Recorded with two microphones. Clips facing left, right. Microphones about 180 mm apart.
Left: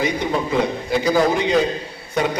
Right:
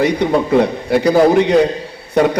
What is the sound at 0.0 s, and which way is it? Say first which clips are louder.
A man's voice: right 7 dB; 65° right (ahead or behind).